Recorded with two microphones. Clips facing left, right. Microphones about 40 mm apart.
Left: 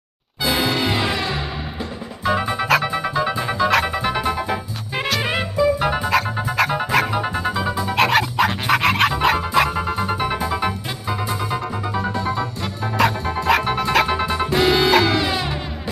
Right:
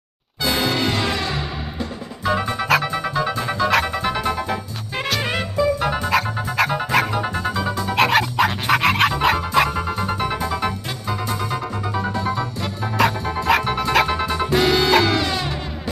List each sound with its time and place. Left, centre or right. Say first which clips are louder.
0.4 s music: left 1 dB; centre
6.0 s music: left 1 dB; centre
7.1 s music: left 1 dB; centre
7.9 s music: even; centre
12.3 s music: even; left
13.7 s music: even; centre
14.1 s music: even; centre
15.0 s music: left 1 dB; centre